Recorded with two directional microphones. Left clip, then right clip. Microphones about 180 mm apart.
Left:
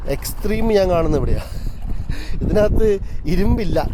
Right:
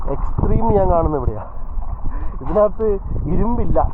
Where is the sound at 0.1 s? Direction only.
35° left (ahead or behind).